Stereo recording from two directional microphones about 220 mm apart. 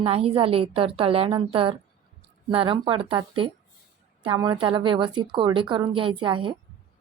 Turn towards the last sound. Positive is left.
turn(degrees=-20)  # may be behind; listen again after turning